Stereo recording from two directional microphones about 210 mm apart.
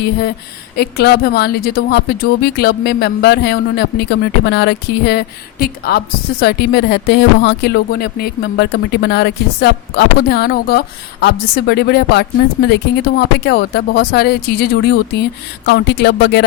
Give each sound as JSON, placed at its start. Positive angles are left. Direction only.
{"t": 0.8, "sound": "speech", "side_deg": 50}